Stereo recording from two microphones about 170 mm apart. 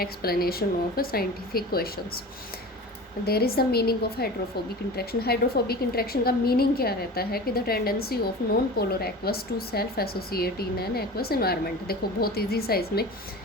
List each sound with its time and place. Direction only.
0.0 s a woman's voice: 60° left (ahead or behind)
3.2 s a woman's voice: 65° left (ahead or behind)